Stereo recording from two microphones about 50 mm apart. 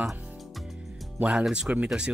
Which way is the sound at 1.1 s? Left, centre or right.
Right.